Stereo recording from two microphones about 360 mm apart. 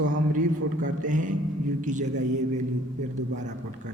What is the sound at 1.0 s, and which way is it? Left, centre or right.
A man's voice, right.